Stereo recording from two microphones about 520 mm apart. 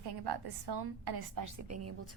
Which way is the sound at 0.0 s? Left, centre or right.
Right.